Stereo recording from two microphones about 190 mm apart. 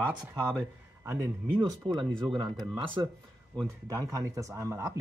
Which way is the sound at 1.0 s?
10° right (ahead or behind).